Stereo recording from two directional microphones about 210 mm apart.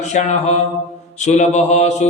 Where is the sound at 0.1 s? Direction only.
35° left (ahead or behind).